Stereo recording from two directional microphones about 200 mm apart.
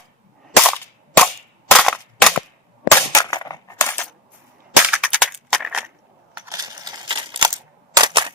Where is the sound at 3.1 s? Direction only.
15° left (ahead or behind).